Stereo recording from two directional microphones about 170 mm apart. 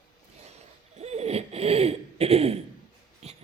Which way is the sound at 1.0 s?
40° right (ahead or behind).